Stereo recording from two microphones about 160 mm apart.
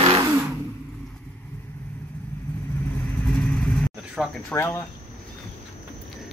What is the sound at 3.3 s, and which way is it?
Vehicle, 5° left (ahead or behind).